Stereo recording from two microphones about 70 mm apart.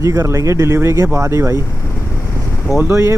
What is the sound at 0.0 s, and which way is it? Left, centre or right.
Speech, right.